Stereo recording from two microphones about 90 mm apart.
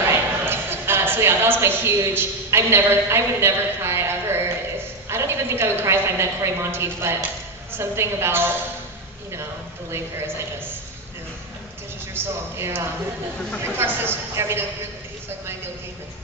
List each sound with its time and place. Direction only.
0.1 s a woman's voice: 25° right (ahead or behind)
12.1 s a woman's voice: 25° right (ahead or behind)